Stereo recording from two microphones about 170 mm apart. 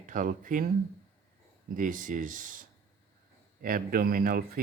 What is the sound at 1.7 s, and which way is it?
Speech, 50° right (ahead or behind).